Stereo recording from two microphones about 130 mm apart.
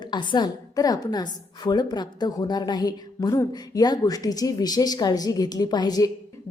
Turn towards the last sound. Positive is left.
turn(degrees=30)  # may be behind; listen again after turning